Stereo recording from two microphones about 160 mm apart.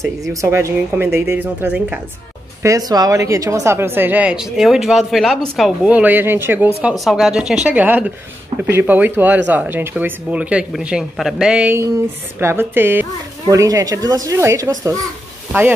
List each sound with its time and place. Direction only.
0.3 s a woman's voice: 20° right (ahead or behind)
2.6 s a woman's voice: 20° right (ahead or behind)